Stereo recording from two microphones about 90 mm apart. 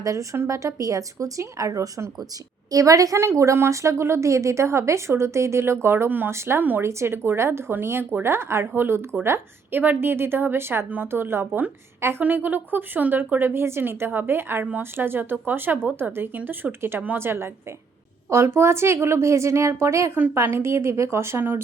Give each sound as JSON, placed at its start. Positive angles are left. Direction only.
{"t": 0.0, "sound": "speech", "side_deg": -35}